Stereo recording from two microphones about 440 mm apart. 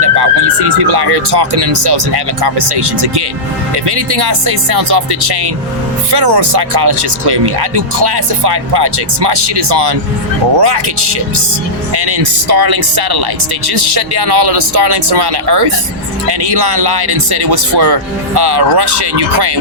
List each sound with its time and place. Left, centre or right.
0.0 s speech: right